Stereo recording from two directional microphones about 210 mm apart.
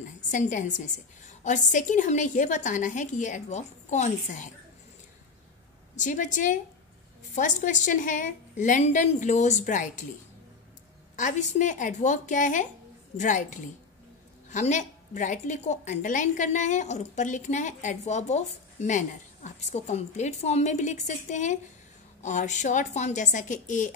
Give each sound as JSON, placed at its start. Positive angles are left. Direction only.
{"t": 0.3, "sound": "a woman's voice", "side_deg": 35}
{"t": 5.9, "sound": "a woman's voice", "side_deg": 35}
{"t": 11.1, "sound": "a woman's voice", "side_deg": 35}